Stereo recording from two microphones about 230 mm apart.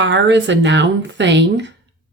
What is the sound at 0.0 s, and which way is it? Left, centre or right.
Speech, right.